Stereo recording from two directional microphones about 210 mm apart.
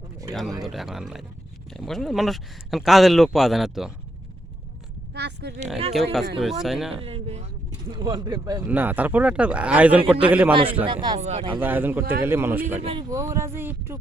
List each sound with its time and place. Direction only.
0.6 s speech: centre (ahead or behind)
5.1 s oink: 50° right (ahead or behind)
5.9 s speech: centre (ahead or behind)
6.9 s a man's voice: 25° right (ahead or behind); by 10.5 s 5° right (ahead or behind)
10.8 s speech: 20° right (ahead or behind)
11.2 s speech: 30° right (ahead or behind)
11.5 s a man's voice: 10° right (ahead or behind)
12.8 s a man's voice: 25° right (ahead or behind)